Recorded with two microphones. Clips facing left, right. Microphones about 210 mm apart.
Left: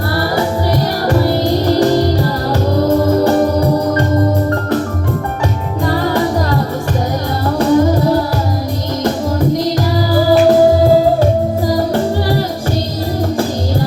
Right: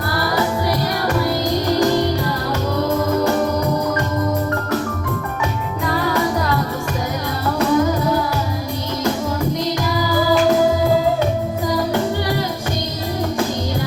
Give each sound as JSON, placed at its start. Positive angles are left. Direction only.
{"t": 1.0, "sound": "music", "side_deg": 35}
{"t": 5.8, "sound": "music", "side_deg": 35}
{"t": 7.6, "sound": "music", "side_deg": 35}
{"t": 10.1, "sound": "music", "side_deg": 35}